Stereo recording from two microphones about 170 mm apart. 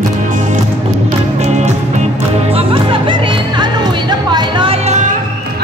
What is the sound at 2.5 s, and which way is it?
Music, 30° right (ahead or behind).